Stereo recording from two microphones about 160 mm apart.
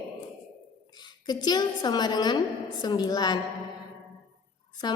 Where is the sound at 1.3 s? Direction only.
25° left (ahead or behind).